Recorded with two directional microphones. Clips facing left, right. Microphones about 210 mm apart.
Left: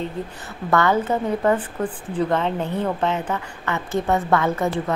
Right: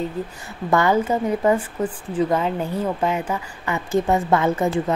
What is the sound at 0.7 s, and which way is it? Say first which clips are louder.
A woman's voice: right 1 dB; 15° right (ahead or behind).